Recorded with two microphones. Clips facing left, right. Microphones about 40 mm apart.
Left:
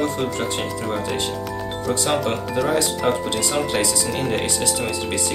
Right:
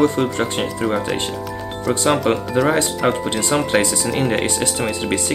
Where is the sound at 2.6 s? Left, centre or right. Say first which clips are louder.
Right 1 dB; right.